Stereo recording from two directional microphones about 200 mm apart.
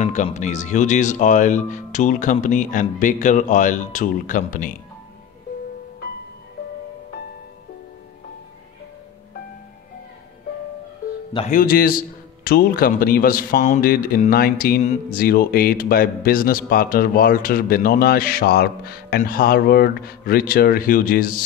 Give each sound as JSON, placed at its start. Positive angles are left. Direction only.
{"t": 0.0, "sound": "speech", "side_deg": 35}
{"t": 11.3, "sound": "speech", "side_deg": 40}